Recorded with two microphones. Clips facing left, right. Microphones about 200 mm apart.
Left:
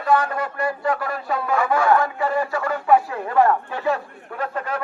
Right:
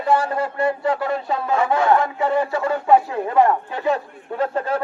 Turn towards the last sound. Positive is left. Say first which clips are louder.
# right 5 dB
turn(degrees=-30)  # may be behind; listen again after turning